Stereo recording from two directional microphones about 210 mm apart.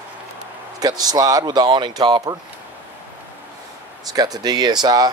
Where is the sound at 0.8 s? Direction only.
20° right (ahead or behind).